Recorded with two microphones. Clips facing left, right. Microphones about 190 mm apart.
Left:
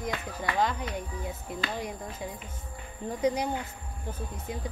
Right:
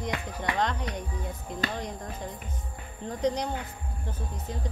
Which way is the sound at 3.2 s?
5° left (ahead or behind).